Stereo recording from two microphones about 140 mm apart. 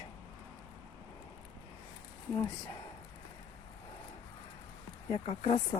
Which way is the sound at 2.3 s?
20° left (ahead or behind).